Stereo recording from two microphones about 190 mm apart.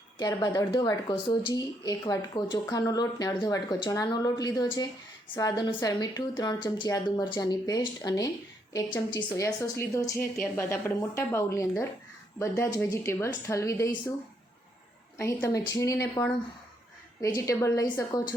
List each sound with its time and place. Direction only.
0.2 s a woman's voice: 20° left (ahead or behind)
15.2 s a woman's voice: 15° left (ahead or behind)